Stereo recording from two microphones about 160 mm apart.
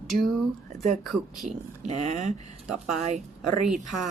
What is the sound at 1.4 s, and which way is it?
Speech, 45° right (ahead or behind).